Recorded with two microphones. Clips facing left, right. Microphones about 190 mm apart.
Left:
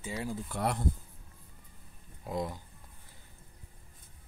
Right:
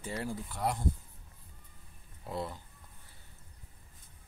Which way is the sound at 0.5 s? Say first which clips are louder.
Left 2 dB; 65° left (ahead or behind).